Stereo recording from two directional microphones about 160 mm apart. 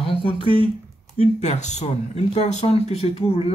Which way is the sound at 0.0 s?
35° left (ahead or behind).